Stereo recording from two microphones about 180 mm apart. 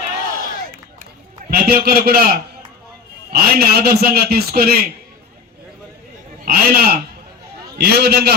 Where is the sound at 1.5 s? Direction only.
60° right (ahead or behind).